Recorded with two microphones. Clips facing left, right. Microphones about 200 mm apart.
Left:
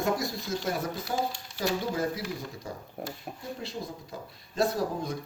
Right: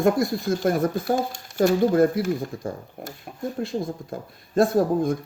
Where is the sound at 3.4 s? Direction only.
50° right (ahead or behind).